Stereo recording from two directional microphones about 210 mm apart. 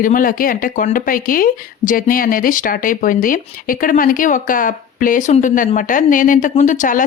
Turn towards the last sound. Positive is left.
turn(degrees=40)  # may be behind; listen again after turning